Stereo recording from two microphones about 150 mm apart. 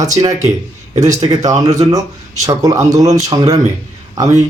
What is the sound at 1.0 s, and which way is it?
Speech, 25° right (ahead or behind).